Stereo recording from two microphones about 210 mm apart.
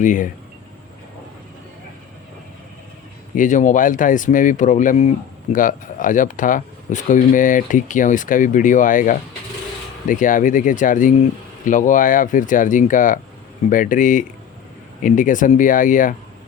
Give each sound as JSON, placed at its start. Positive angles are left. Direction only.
{"t": 0.0, "sound": "speech", "side_deg": 40}
{"t": 3.3, "sound": "speech", "side_deg": 35}